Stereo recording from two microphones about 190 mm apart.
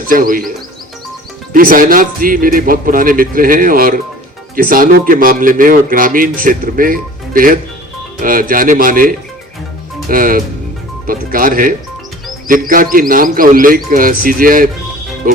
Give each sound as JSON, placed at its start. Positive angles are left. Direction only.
{"t": 0.1, "sound": "speech", "side_deg": -45}
{"t": 1.5, "sound": "speech", "side_deg": -45}
{"t": 10.1, "sound": "speech", "side_deg": -45}